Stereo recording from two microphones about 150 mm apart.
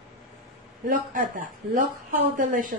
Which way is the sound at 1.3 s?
65° right (ahead or behind).